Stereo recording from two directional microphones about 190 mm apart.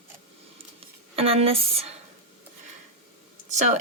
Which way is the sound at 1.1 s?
30° right (ahead or behind).